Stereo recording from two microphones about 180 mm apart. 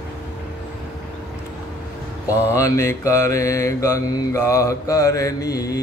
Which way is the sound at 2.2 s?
15° left (ahead or behind).